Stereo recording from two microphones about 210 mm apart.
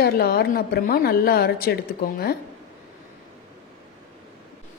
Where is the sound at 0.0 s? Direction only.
50° left (ahead or behind).